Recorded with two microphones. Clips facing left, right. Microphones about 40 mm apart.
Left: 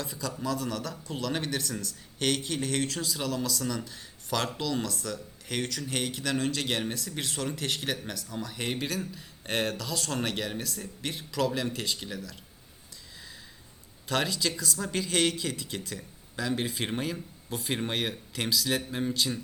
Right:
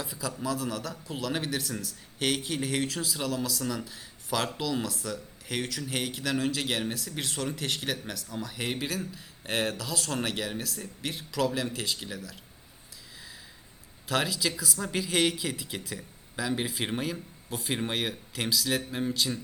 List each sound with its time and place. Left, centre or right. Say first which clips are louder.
0.0 s a man's voice: even; centre
14.1 s a man's voice: even; centre